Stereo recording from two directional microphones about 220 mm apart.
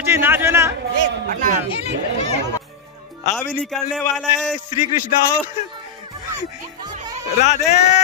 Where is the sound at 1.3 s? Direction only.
35° right (ahead or behind).